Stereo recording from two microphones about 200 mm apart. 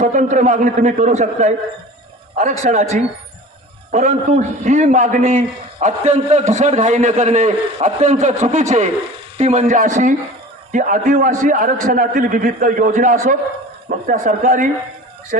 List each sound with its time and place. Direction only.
0.0 s a man's voice: 40° right (ahead or behind)
2.6 s a man's voice: 35° right (ahead or behind)